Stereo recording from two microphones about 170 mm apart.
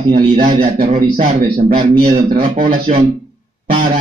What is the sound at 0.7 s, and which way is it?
Speech, 60° right (ahead or behind).